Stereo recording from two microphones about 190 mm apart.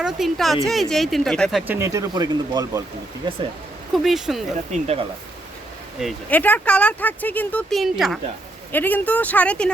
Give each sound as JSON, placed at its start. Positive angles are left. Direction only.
{"t": 0.0, "sound": "speech", "side_deg": 0}
{"t": 1.6, "sound": "speech", "side_deg": -15}
{"t": 3.9, "sound": "speech", "side_deg": 0}
{"t": 6.0, "sound": "speech", "side_deg": 5}
{"t": 8.7, "sound": "speech", "side_deg": 10}